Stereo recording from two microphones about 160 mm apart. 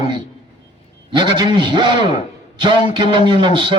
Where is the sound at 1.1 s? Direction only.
30° right (ahead or behind).